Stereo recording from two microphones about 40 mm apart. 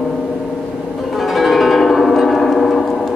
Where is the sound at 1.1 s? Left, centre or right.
Centre.